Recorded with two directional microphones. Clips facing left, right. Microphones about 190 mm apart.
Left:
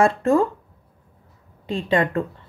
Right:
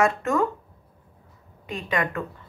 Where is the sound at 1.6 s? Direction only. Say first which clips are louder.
Left 6 dB; 30° left (ahead or behind).